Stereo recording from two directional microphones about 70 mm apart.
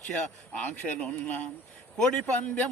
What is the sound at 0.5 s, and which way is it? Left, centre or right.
A man's voice, centre.